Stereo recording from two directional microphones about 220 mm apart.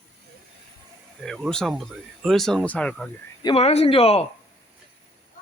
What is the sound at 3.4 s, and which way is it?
Speech, 25° left (ahead or behind).